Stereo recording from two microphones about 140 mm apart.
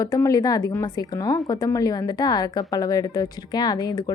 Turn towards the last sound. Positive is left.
turn(degrees=25)  # may be behind; listen again after turning